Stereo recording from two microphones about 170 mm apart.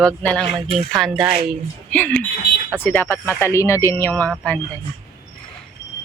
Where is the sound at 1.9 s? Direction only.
10° left (ahead or behind).